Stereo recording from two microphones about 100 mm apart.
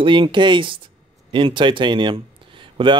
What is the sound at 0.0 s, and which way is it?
Speech, 55° right (ahead or behind).